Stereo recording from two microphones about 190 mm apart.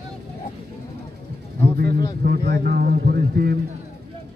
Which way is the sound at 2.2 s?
55° right (ahead or behind).